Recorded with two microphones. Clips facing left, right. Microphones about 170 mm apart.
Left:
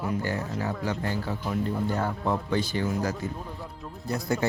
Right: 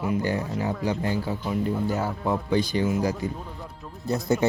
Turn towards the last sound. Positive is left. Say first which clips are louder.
# right 4 dB
turn(degrees=-20)  # may be behind; listen again after turning